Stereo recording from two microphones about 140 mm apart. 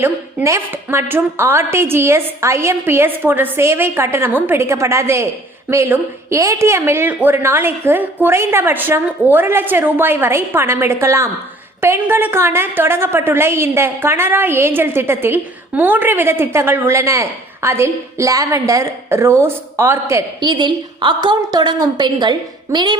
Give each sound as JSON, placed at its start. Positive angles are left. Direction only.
{"t": 0.0, "sound": "a woman's voice", "side_deg": -15}
{"t": 20.4, "sound": "a woman's voice", "side_deg": -35}